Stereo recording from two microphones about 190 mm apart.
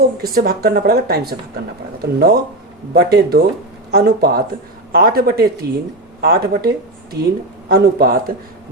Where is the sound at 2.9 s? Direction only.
55° right (ahead or behind).